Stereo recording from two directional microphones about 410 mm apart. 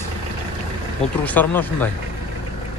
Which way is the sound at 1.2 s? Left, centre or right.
Centre.